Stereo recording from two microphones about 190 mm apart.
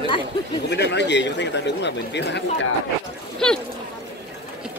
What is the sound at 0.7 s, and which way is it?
Speech, 65° left (ahead or behind).